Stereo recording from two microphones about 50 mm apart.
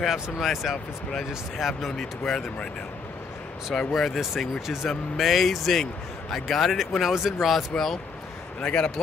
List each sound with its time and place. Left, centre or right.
0.0 s speech: centre
3.9 s speech: centre
8.5 s speech: left